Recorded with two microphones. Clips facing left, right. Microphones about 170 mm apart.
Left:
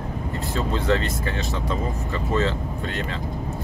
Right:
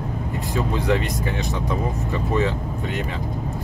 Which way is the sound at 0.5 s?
15° right (ahead or behind).